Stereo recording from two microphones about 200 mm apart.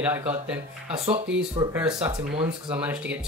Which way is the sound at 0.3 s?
5° right (ahead or behind).